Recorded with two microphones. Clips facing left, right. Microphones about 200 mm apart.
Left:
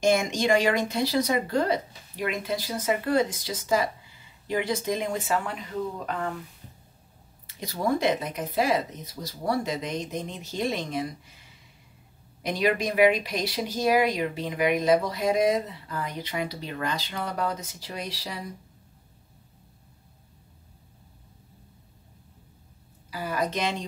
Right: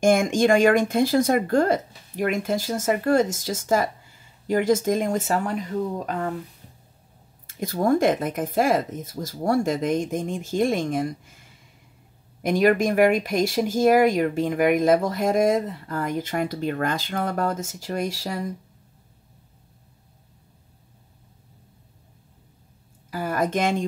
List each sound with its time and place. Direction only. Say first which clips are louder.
0.0 s speech: right 5 dB; 50° right (ahead or behind)
7.4 s speech: right 5 dB; 50° right (ahead or behind)
23.0 s a sound: right 4 dB; 50° right (ahead or behind)